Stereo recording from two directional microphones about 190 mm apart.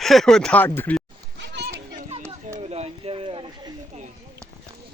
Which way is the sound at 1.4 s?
65° right (ahead or behind).